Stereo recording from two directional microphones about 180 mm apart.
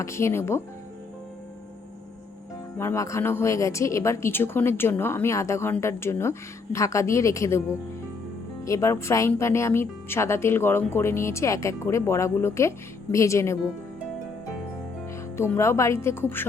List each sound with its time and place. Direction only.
0.0 s speech: 15° left (ahead or behind)
2.7 s speech: 15° left (ahead or behind)
8.6 s speech: 15° left (ahead or behind)
15.4 s speech: 15° left (ahead or behind)